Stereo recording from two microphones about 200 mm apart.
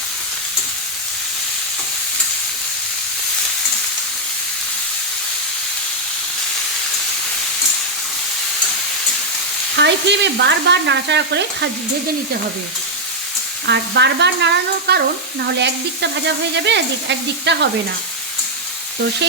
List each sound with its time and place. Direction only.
9.7 s speech: 60° right (ahead or behind)
13.7 s speech: 60° right (ahead or behind)